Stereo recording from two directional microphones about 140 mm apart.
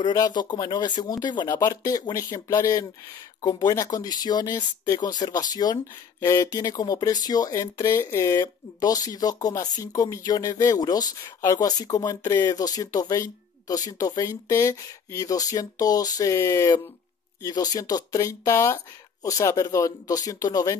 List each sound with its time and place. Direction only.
0.0 s speech: 30° left (ahead or behind)